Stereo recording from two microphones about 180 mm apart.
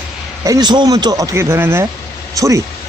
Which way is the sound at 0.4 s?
20° right (ahead or behind).